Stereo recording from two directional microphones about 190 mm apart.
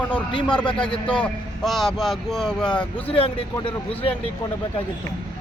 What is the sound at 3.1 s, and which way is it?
Speech, 30° left (ahead or behind).